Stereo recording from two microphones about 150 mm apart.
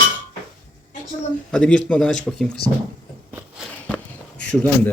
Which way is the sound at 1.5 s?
5° left (ahead or behind).